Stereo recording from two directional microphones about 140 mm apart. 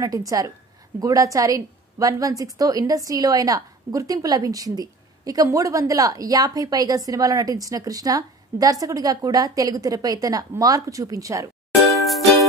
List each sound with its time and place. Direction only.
0.0 s a woman's voice: 25° right (ahead or behind)